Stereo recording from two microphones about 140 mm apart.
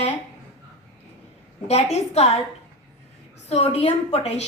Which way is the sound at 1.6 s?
50° left (ahead or behind).